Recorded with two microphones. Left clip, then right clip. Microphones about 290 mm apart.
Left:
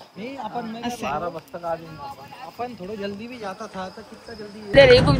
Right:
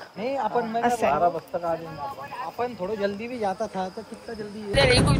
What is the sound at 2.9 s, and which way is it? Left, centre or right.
Speech, right.